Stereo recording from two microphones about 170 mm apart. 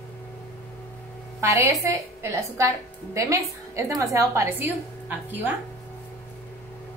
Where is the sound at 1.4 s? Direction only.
15° right (ahead or behind).